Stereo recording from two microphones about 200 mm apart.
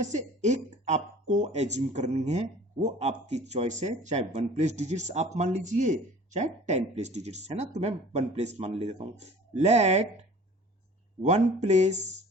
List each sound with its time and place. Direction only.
0.0 s speech: 35° right (ahead or behind)
11.2 s speech: 35° right (ahead or behind)